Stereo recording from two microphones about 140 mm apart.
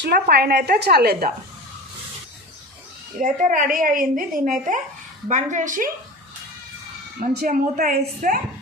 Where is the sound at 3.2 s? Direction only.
75° right (ahead or behind).